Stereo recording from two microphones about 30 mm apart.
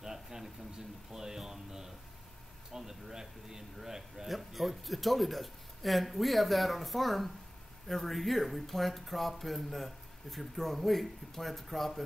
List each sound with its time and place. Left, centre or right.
0.0 s a sound: centre
2.7 s speech: centre
4.3 s speech: centre